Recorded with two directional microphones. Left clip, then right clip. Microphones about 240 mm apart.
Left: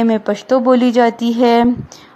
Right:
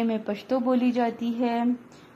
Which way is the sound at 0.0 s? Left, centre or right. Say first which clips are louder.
Left 12 dB; left.